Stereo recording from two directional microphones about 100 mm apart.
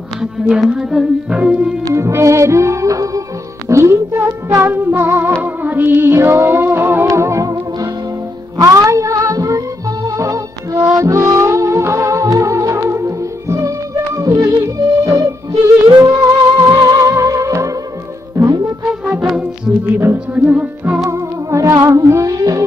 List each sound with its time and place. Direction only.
0.2 s speech: 5° right (ahead or behind)
1.8 s music: 30° right (ahead or behind)
8.5 s music: 35° right (ahead or behind)
15.9 s music: 45° right (ahead or behind)
19.2 s music: 10° right (ahead or behind)
20.0 s speech: 20° right (ahead or behind)
21.1 s music: 30° right (ahead or behind)